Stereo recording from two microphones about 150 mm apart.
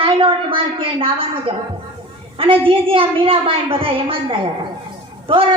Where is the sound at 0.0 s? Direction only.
35° right (ahead or behind).